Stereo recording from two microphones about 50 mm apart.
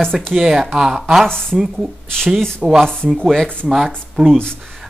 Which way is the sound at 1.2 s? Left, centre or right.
Centre.